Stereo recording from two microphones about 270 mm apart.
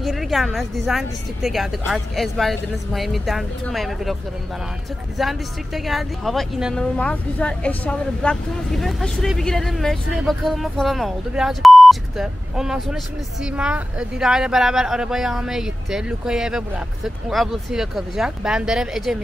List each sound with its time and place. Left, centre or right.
0.0 s a woman's voice: centre